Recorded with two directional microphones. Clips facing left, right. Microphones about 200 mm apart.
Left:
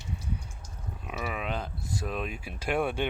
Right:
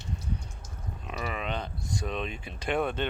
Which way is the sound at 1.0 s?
5° left (ahead or behind).